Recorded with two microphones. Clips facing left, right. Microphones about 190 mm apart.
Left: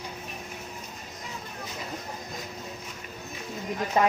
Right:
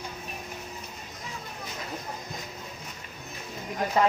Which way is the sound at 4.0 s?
20° left (ahead or behind).